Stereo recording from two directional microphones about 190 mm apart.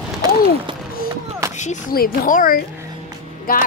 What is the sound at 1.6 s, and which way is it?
Speech, 45° left (ahead or behind).